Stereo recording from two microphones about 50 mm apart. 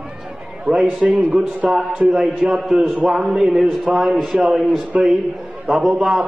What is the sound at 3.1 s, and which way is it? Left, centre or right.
A man's voice, centre.